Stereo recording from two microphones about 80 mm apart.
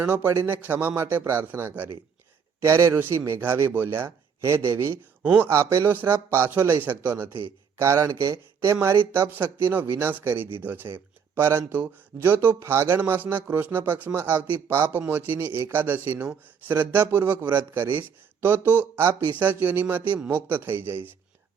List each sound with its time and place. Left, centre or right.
0.3 s speech: right
2.6 s speech: right
5.2 s speech: centre
5.5 s speech: right
7.8 s speech: right
8.3 s speech: right